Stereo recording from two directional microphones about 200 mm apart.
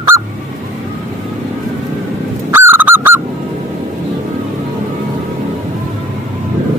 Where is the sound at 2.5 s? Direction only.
10° right (ahead or behind).